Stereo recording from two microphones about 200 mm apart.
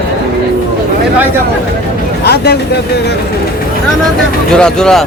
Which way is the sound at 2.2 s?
55° left (ahead or behind).